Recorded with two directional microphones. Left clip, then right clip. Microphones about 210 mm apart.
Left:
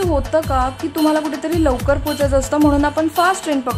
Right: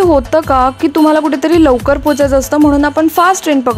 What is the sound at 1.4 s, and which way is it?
Speech, 35° right (ahead or behind).